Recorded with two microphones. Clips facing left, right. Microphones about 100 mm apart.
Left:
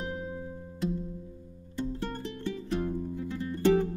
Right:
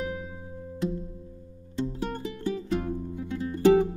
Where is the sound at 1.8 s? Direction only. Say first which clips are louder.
Right 3 dB; 20° right (ahead or behind).